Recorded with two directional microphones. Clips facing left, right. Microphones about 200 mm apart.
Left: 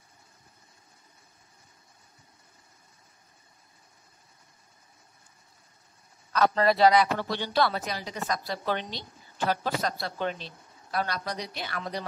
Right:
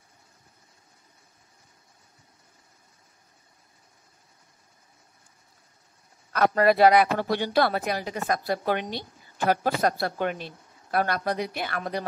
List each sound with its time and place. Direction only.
6.3 s a woman's voice: 50° right (ahead or behind)